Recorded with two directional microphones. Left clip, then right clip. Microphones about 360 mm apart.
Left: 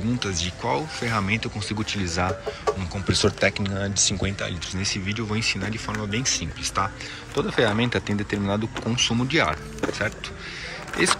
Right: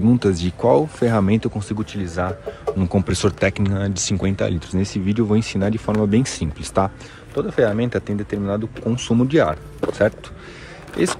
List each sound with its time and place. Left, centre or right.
0.2 s speech: centre
2.9 s speech: centre